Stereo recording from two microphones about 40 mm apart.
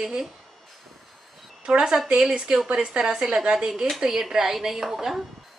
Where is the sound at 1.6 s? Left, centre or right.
Centre.